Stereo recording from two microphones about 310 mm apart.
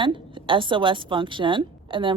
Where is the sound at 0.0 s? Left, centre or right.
Centre.